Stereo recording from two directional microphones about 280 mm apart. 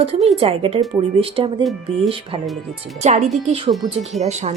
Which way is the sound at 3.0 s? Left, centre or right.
Right.